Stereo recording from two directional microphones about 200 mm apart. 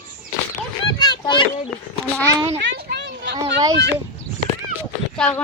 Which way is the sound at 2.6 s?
60° right (ahead or behind).